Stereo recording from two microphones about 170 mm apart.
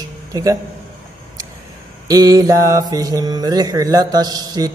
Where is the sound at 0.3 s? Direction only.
20° right (ahead or behind).